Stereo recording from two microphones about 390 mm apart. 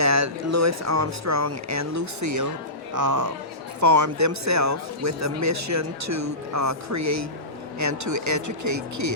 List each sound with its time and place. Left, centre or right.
0.0 s speech: right